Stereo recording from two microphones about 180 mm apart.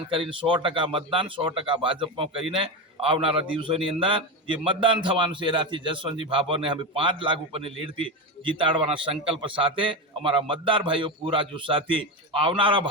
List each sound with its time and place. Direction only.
0.1 s a man's voice: 30° right (ahead or behind)